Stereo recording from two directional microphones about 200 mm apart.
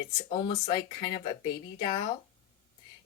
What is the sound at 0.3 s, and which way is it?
Speech, 30° left (ahead or behind).